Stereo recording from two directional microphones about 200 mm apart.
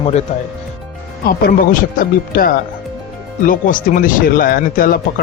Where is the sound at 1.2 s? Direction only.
45° left (ahead or behind).